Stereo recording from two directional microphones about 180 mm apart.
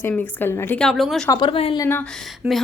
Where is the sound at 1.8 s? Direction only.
10° left (ahead or behind).